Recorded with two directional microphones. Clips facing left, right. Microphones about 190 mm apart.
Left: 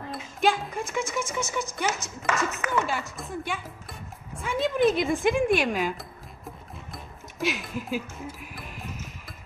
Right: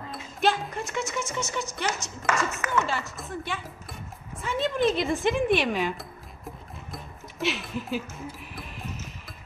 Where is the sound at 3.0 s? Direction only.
Centre (ahead or behind).